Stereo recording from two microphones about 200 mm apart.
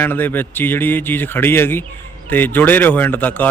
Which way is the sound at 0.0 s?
10° left (ahead or behind).